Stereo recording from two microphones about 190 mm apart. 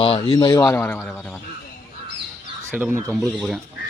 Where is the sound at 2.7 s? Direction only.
10° right (ahead or behind).